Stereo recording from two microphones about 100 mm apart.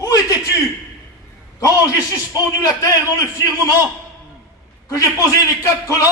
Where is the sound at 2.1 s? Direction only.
30° left (ahead or behind).